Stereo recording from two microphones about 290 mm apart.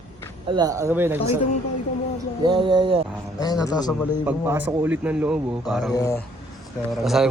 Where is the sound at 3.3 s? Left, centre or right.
Centre.